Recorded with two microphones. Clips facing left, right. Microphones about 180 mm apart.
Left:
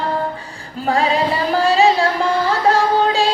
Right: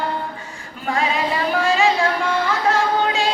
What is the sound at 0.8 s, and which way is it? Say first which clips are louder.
Female singing: left 5 dB; 35° left (ahead or behind).